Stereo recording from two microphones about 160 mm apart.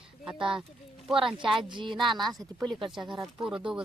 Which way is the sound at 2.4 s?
5° left (ahead or behind).